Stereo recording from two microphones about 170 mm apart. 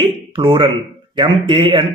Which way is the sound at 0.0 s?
30° right (ahead or behind).